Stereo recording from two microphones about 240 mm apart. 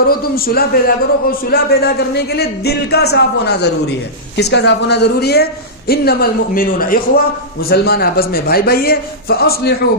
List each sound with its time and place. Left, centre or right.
0.1 s a man's voice: left